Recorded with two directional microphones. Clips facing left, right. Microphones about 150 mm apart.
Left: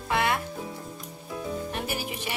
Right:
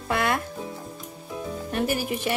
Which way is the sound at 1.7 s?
50° right (ahead or behind).